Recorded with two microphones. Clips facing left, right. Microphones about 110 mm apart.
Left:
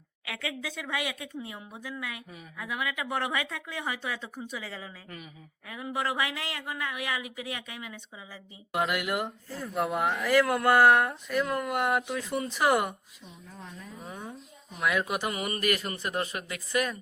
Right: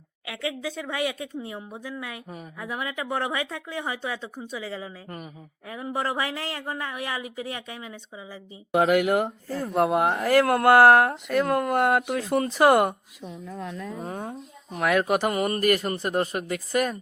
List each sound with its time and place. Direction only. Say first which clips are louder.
0.3 s speech: right 5 dB; 30° right (ahead or behind)
5.0 s speech: right 6 dB; 40° right (ahead or behind)
9.0 s speech: right 9 dB; 60° right (ahead or behind)
9.9 s speech: right 6 dB; 40° right (ahead or behind)
10.5 s speech: right 7 dB; 70° right (ahead or behind); by 11.7 s 50° right (ahead or behind)
11.7 s speech: right 5 dB; 35° right (ahead or behind)
12.0 s speech: right 7 dB; 60° right (ahead or behind)
13.2 s a woman's voice: right 11 dB; 90° right
14.0 s speech: right 4 dB; 40° right (ahead or behind)
14.7 s speech: right 6 dB; 60° right (ahead or behind)
15.2 s speech: right 7 dB; 40° right (ahead or behind)